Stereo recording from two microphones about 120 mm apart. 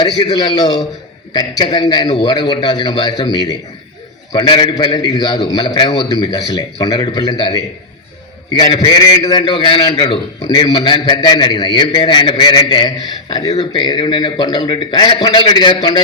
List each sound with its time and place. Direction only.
0.0 s a man's voice: 35° left (ahead or behind)